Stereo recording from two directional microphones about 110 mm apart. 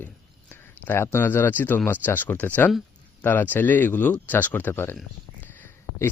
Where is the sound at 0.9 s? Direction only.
25° left (ahead or behind).